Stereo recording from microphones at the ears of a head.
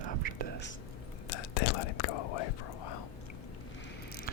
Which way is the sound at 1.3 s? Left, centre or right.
Left.